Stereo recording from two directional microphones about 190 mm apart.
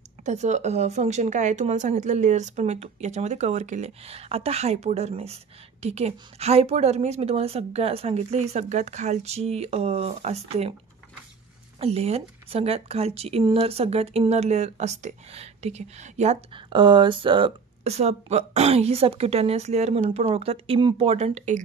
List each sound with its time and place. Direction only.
0.2 s speech: 40° right (ahead or behind)
11.8 s speech: 35° right (ahead or behind)